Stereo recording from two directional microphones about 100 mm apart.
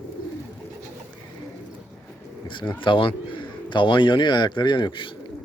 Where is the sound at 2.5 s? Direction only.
55° left (ahead or behind).